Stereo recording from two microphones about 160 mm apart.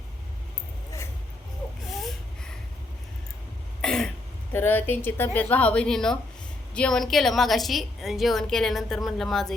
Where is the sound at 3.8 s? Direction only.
5° left (ahead or behind).